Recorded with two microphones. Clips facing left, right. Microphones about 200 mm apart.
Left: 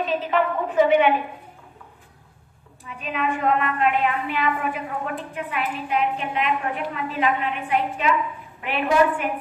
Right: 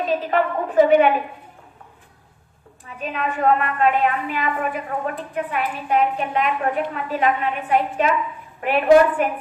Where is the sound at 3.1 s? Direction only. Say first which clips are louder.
Right 2 dB; 45° right (ahead or behind).